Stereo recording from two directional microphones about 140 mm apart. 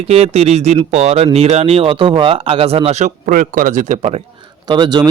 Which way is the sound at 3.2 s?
75° right (ahead or behind).